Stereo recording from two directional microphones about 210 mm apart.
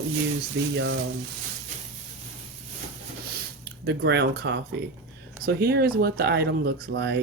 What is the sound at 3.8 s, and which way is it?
Speech, 55° right (ahead or behind).